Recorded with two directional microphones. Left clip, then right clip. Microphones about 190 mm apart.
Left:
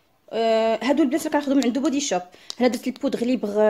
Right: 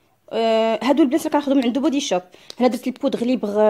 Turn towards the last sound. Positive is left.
turn(degrees=-25)  # may be behind; listen again after turning